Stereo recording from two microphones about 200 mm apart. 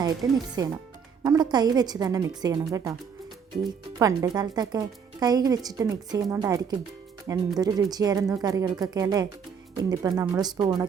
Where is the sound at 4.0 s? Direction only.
20° right (ahead or behind).